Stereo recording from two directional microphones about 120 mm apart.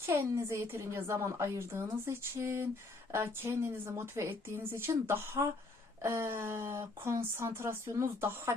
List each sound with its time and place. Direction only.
0.0 s a woman's voice: 20° right (ahead or behind)